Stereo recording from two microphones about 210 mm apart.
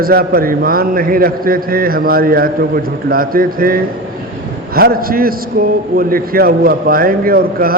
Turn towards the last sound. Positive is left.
turn(degrees=-45)  # may be behind; listen again after turning